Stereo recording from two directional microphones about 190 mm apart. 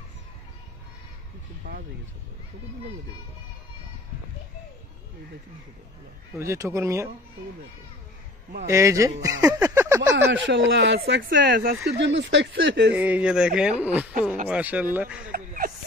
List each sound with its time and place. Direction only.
1.6 s speech: 50° right (ahead or behind)
6.3 s speech: 15° right (ahead or behind)
8.6 s speech: 15° right (ahead or behind)
10.1 s speech: 70° right (ahead or behind)
12.9 s speech: 10° right (ahead or behind)
15.3 s a sound: 45° right (ahead or behind)